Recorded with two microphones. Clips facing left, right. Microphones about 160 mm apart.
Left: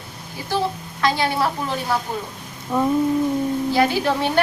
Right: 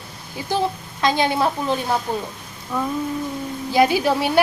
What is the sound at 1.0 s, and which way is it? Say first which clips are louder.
Speech: right 1 dB; 20° right (ahead or behind).